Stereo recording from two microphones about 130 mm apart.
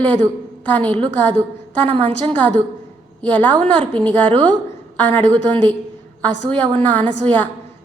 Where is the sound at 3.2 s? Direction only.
15° left (ahead or behind).